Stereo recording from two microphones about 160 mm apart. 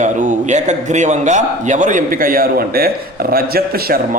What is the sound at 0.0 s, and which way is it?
A man's voice, 50° right (ahead or behind).